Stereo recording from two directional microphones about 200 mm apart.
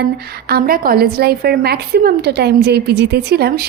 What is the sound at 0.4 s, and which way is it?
A woman's voice, 50° right (ahead or behind).